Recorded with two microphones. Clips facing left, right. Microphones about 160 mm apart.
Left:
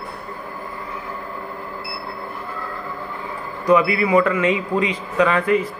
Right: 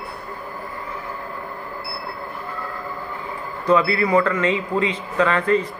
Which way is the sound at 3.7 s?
15° left (ahead or behind).